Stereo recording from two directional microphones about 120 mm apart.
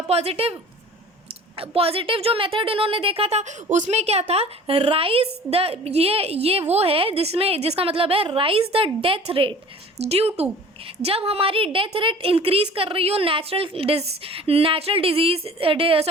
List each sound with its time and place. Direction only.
0.1 s a woman's voice: 55° right (ahead or behind)
1.5 s speech: 55° right (ahead or behind)
10.0 s a woman's voice: 60° right (ahead or behind)